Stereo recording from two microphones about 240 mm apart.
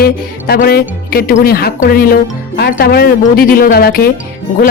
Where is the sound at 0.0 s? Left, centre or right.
Left.